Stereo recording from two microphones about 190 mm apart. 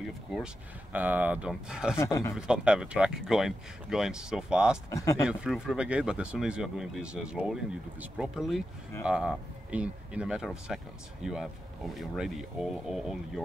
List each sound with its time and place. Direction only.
0.9 s speech: 10° right (ahead or behind)
2.0 s speech: 15° left (ahead or behind)
2.3 s speech: 5° right (ahead or behind)
4.9 s speech: 15° left (ahead or behind)
5.3 s speech: 5° right (ahead or behind)